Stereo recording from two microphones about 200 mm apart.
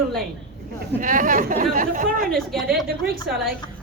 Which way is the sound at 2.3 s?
Centre (ahead or behind).